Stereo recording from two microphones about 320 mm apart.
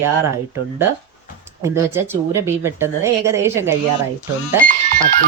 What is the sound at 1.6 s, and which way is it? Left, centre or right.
A woman's voice, centre.